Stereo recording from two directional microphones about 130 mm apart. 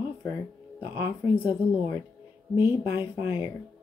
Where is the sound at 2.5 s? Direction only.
20° right (ahead or behind).